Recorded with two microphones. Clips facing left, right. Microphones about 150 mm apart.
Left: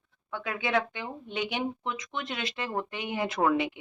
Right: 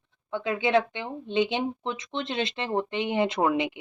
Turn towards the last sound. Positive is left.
turn(degrees=-20)  # may be behind; listen again after turning